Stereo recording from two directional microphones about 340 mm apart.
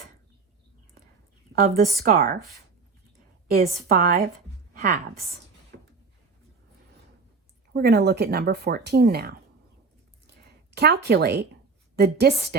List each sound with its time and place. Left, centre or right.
2.0 s speech: right
3.5 s speech: right
4.7 s a sound: right
7.7 s speech: right
10.2 s a sound: right
11.9 s speech: right